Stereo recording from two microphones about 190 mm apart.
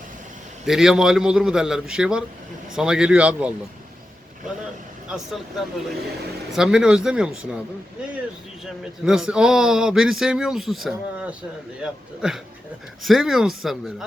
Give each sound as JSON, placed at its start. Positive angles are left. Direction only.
{"t": 0.6, "sound": "speech", "side_deg": 0}
{"t": 5.0, "sound": "speech", "side_deg": -5}
{"t": 6.5, "sound": "speech", "side_deg": -5}
{"t": 8.8, "sound": "speech", "side_deg": -5}